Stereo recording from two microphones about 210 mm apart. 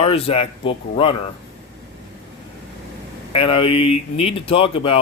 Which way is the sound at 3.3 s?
25° left (ahead or behind).